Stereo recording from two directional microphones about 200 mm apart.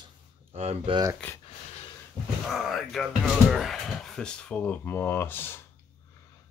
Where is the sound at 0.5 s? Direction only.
30° right (ahead or behind).